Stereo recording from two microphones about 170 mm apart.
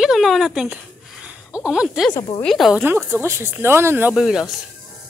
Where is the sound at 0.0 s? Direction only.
Centre (ahead or behind).